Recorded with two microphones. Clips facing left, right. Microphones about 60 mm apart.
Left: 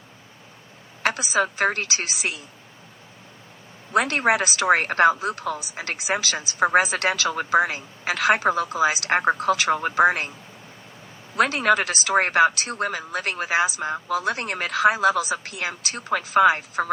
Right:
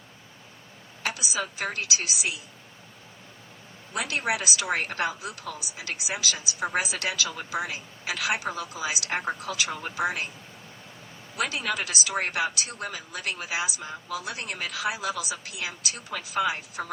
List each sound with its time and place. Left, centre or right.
1.0 s speech: left
3.9 s speech: left
11.3 s speech: left